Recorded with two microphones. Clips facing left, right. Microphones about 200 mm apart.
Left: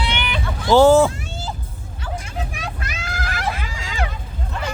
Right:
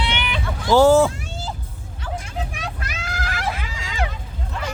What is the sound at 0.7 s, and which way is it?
Speech, 25° left (ahead or behind).